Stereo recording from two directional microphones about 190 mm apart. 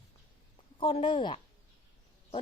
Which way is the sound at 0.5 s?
30° left (ahead or behind).